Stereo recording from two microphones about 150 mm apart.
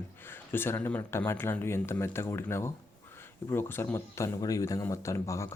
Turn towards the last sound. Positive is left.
turn(degrees=20)  # may be behind; listen again after turning